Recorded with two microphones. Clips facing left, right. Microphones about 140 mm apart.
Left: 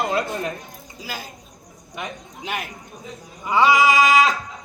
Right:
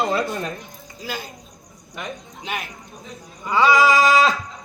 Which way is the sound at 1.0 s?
5° left (ahead or behind).